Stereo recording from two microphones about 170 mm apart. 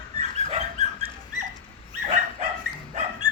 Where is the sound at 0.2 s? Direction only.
40° right (ahead or behind).